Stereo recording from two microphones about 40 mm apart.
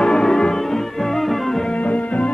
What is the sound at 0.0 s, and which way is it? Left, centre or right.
Music, centre.